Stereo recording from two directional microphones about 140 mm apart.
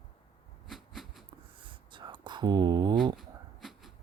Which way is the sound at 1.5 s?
35° right (ahead or behind).